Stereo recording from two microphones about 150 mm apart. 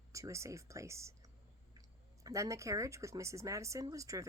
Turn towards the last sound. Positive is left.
turn(degrees=-20)  # may be behind; listen again after turning